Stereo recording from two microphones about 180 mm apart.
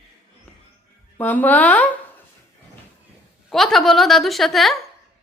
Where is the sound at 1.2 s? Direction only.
10° left (ahead or behind).